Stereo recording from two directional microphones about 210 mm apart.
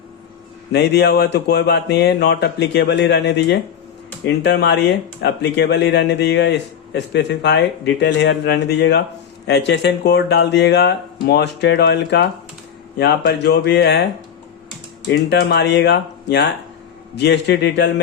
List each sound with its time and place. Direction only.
0.7 s speech: 50° left (ahead or behind)